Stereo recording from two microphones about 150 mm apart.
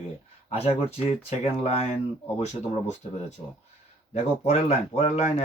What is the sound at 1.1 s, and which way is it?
Speech, 45° left (ahead or behind).